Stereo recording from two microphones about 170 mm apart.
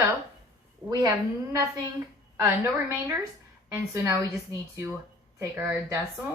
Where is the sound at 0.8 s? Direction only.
25° right (ahead or behind).